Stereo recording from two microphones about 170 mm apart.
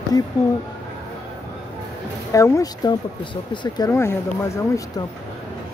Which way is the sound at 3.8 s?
15° left (ahead or behind).